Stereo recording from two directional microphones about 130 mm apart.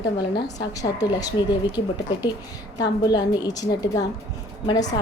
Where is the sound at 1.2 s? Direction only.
35° left (ahead or behind).